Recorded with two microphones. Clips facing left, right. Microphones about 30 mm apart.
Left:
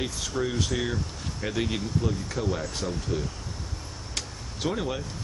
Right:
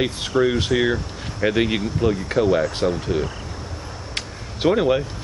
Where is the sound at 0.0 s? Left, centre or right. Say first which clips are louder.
Right 10 dB; right.